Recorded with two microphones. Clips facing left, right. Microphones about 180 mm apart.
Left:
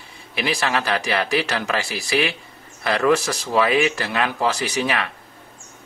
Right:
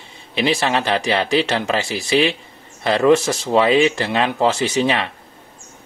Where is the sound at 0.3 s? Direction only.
25° right (ahead or behind).